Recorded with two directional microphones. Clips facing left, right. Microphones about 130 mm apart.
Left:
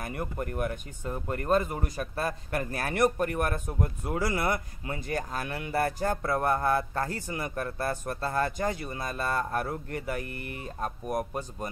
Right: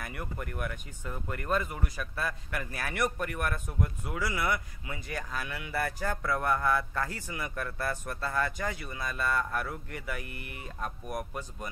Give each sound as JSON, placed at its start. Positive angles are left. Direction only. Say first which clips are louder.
{"t": 0.0, "sound": "speech", "louder": "left 5 dB", "side_deg": 35}